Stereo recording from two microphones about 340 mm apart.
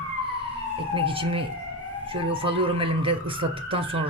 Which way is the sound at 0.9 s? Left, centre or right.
Centre.